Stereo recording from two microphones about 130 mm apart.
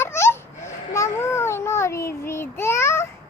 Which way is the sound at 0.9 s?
20° left (ahead or behind).